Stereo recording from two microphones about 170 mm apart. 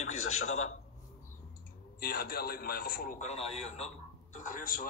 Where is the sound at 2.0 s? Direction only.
60° left (ahead or behind).